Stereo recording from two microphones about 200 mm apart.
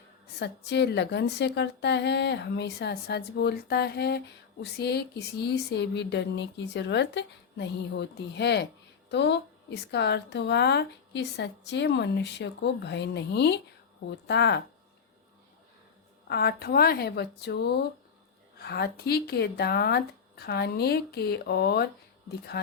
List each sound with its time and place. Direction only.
0.3 s a woman's voice: 55° left (ahead or behind)
16.3 s speech: 55° left (ahead or behind)